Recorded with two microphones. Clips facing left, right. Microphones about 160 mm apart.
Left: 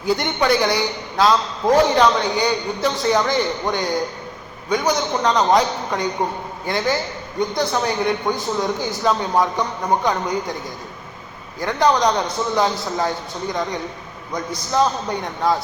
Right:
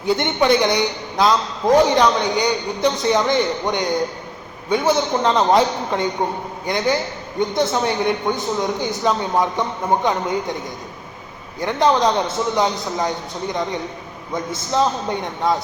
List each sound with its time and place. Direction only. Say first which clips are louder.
0.0 s a man's voice: right 2 dB; 20° right (ahead or behind)
11.6 s a man's voice: right 1 dB; 25° right (ahead or behind)